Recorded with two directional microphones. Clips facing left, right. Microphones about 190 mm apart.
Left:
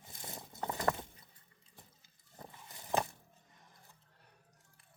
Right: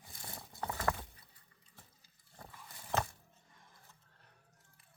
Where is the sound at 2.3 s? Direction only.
20° left (ahead or behind).